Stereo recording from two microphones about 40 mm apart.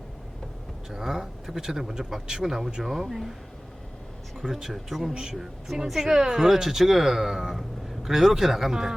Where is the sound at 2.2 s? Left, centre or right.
Centre.